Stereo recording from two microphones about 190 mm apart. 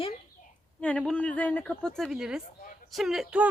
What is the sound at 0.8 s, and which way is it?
A woman's voice, 5° left (ahead or behind).